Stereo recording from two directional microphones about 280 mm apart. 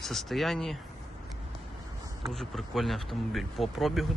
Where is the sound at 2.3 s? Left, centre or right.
Centre.